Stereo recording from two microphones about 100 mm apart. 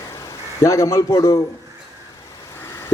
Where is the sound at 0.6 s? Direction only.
30° left (ahead or behind).